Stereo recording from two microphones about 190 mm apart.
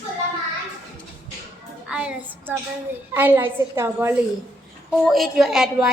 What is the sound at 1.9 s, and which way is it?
Child singing, 5° right (ahead or behind).